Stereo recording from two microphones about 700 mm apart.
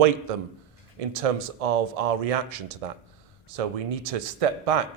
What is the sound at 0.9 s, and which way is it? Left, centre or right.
Speech, right.